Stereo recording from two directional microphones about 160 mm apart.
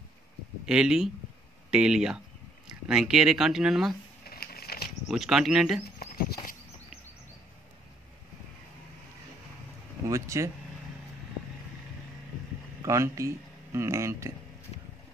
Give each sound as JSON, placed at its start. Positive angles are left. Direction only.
{"t": 0.7, "sound": "speech", "side_deg": -5}
{"t": 4.2, "sound": "a sound", "side_deg": 70}
{"t": 4.8, "sound": "speech", "side_deg": 0}
{"t": 5.9, "sound": "patter", "side_deg": 70}
{"t": 10.0, "sound": "speech", "side_deg": -20}
{"t": 12.8, "sound": "speech", "side_deg": -20}